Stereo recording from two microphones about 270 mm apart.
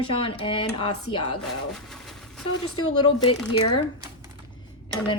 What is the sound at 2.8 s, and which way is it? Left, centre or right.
Speech, left.